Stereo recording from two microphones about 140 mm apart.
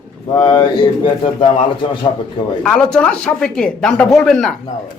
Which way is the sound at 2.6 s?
5° left (ahead or behind).